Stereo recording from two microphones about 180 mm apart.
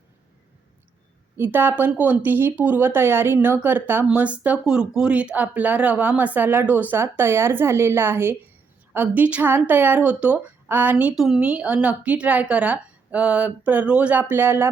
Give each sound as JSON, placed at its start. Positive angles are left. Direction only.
{"t": 1.4, "sound": "speech", "side_deg": -10}